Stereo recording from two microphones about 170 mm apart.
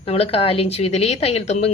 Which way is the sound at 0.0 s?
35° left (ahead or behind).